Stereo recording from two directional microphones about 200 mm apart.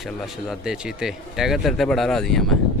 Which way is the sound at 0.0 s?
Centre (ahead or behind).